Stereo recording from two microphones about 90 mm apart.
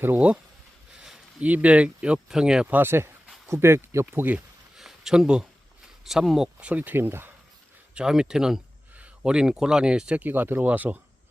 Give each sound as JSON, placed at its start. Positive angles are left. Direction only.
{"t": 0.0, "sound": "speech", "side_deg": -25}
{"t": 0.9, "sound": "a sound", "side_deg": -5}
{"t": 2.1, "sound": "speech", "side_deg": -5}
{"t": 2.7, "sound": "speech", "side_deg": -25}
{"t": 4.8, "sound": "a sound", "side_deg": -5}
{"t": 6.1, "sound": "speech", "side_deg": -5}
{"t": 7.9, "sound": "speech", "side_deg": -10}